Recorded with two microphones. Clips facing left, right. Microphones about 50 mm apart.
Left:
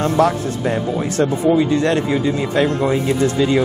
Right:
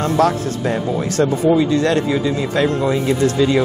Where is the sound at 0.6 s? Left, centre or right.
Left.